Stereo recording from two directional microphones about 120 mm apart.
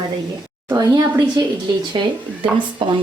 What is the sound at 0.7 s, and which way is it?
Speech, 30° right (ahead or behind).